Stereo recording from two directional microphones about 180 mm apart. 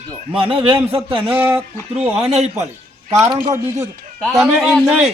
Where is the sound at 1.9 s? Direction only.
35° right (ahead or behind).